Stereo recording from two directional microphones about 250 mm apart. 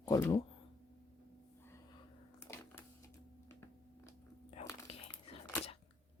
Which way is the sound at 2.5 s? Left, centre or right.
Centre.